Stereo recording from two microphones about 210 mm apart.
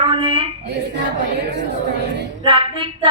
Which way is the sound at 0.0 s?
25° right (ahead or behind).